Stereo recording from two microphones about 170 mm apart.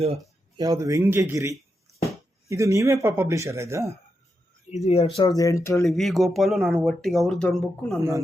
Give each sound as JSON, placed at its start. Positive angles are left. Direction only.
{"t": 0.0, "sound": "a sound", "side_deg": -35}
{"t": 0.6, "sound": "speech", "side_deg": -20}
{"t": 4.7, "sound": "speech", "side_deg": 35}
{"t": 5.9, "sound": "speech", "side_deg": 0}